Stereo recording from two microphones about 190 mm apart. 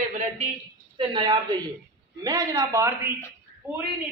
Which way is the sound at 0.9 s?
25° right (ahead or behind).